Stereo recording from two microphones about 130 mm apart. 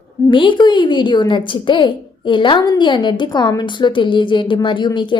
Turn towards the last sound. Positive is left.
turn(degrees=35)  # may be behind; listen again after turning